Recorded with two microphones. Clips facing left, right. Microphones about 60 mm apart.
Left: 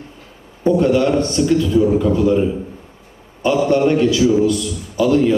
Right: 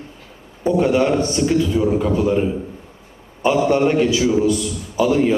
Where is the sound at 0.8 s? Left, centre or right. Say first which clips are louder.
Even; right.